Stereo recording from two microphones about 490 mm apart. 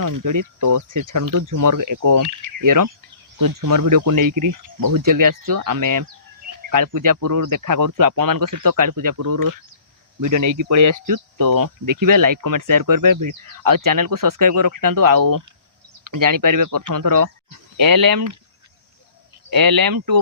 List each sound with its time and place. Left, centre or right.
0.0 s speech: right
19.5 s speech: right